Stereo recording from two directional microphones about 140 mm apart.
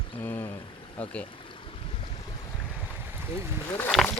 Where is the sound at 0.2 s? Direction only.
15° left (ahead or behind).